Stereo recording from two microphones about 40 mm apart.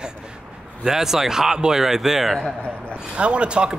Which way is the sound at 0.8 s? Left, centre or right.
Centre.